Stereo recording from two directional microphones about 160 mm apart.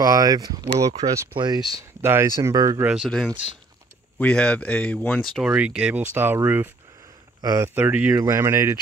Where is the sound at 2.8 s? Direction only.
5° right (ahead or behind).